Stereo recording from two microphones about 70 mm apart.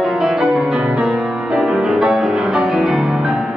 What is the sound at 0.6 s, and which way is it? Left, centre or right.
Music, centre.